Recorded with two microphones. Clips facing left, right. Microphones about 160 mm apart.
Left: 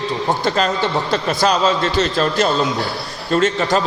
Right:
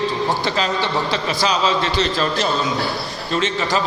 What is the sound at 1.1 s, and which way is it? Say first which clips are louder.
A man's voice: left 3 dB; 45° left (ahead or behind).